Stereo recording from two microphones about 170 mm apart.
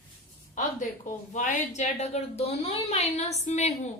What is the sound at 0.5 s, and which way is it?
Speech, 50° left (ahead or behind).